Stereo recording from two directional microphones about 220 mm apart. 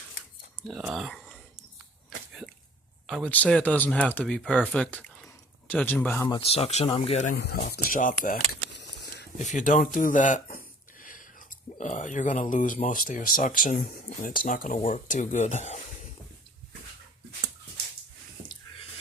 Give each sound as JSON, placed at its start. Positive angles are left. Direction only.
{"t": 0.7, "sound": "speech", "side_deg": 0}
{"t": 2.0, "sound": "a sound", "side_deg": 0}
{"t": 3.1, "sound": "speech", "side_deg": 5}
{"t": 6.2, "sound": "speech", "side_deg": 25}
{"t": 8.7, "sound": "a sound", "side_deg": 50}
{"t": 9.4, "sound": "speech", "side_deg": 35}